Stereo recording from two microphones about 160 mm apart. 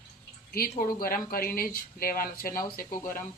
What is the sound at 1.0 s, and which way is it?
Speech, 65° left (ahead or behind).